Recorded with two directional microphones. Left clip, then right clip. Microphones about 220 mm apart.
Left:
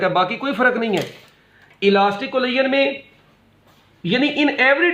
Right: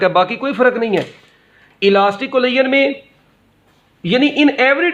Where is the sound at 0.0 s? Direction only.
40° right (ahead or behind).